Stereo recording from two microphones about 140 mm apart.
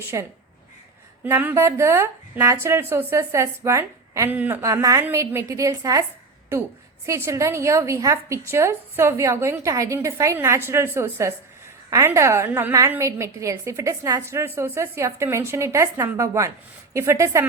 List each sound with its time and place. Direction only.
0.1 s a woman's voice: 25° right (ahead or behind)
1.2 s a woman's voice: 15° right (ahead or behind)
4.6 s a woman's voice: 25° right (ahead or behind)